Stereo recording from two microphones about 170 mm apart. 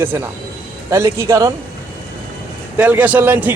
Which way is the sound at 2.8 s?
10° right (ahead or behind).